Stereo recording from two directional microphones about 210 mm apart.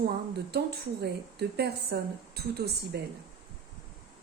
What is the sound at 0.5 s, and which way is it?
A woman's voice, 50° right (ahead or behind).